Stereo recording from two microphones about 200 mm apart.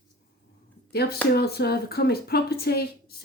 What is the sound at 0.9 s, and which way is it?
Speech, 50° left (ahead or behind).